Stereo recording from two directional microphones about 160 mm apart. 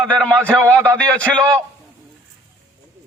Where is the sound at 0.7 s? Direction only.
15° right (ahead or behind).